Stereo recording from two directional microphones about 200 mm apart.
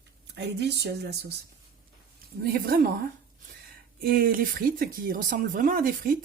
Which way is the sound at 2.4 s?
50° right (ahead or behind).